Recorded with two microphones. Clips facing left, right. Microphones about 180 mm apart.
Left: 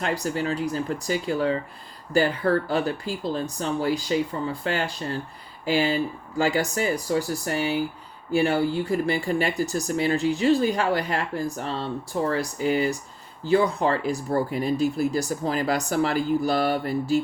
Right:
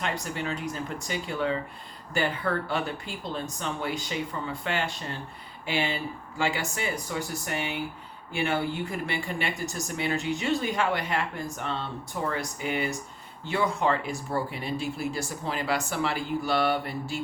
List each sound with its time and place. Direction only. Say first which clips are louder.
0.0 s speech: left 6 dB; 40° left (ahead or behind)